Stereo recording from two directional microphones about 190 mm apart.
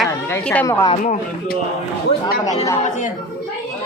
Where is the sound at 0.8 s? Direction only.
35° left (ahead or behind).